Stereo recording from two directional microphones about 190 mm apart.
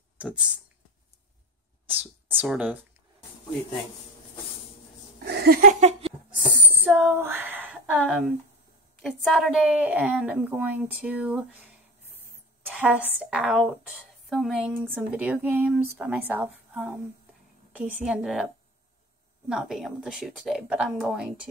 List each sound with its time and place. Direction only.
0.2 s a woman's voice: 5° right (ahead or behind)
2.2 s a woman's voice: 5° right (ahead or behind)
5.2 s a sound: 55° right (ahead or behind); by 6.1 s 35° right (ahead or behind)
7.0 s female singing: 10° right (ahead or behind)
9.0 s a woman's voice: centre (ahead or behind)
12.7 s a woman's voice: 5° right (ahead or behind)
19.5 s speech: centre (ahead or behind)